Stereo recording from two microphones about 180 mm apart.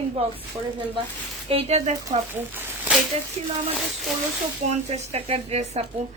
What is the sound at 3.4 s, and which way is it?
Speech, 35° right (ahead or behind).